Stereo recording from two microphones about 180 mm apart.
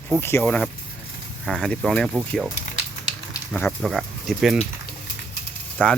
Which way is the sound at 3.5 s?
5° left (ahead or behind).